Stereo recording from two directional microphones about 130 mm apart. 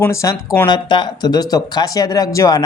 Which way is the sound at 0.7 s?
35° left (ahead or behind).